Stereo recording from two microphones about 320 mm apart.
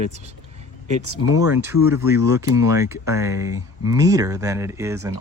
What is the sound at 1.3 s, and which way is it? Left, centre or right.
Speech, centre.